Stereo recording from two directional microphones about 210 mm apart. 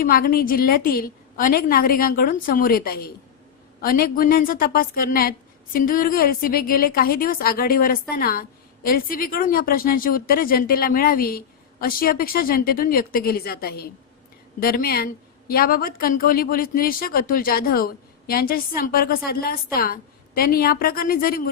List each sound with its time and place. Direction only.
0.0 s a woman's voice: 45° left (ahead or behind)